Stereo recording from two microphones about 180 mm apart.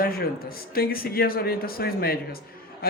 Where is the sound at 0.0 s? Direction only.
55° left (ahead or behind).